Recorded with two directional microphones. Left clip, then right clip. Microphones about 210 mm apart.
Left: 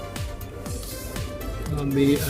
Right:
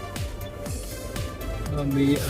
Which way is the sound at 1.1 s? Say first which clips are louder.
Left 1 dB; centre (ahead or behind).